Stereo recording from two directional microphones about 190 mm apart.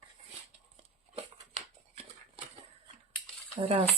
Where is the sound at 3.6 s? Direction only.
30° right (ahead or behind).